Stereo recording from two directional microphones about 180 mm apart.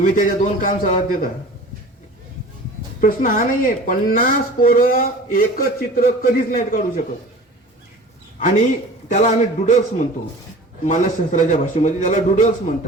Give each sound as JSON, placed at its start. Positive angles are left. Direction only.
{"t": 0.0, "sound": "speech", "side_deg": 50}
{"t": 3.0, "sound": "speech", "side_deg": 50}
{"t": 8.4, "sound": "a man's voice", "side_deg": 45}